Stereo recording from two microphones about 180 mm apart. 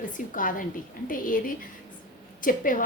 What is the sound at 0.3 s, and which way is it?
A woman's voice, 50° left (ahead or behind).